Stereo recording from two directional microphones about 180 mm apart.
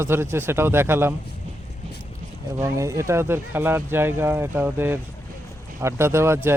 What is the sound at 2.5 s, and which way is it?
Speech, 15° right (ahead or behind).